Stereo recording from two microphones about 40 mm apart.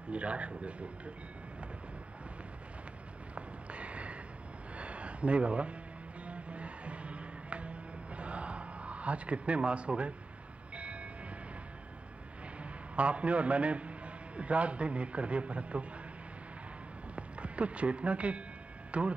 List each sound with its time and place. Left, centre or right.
0.1 s a man's voice: right
3.3 s a sound: right
6.2 s music: right
10.7 s train: right
12.9 s a man's voice: right
17.1 s speech: right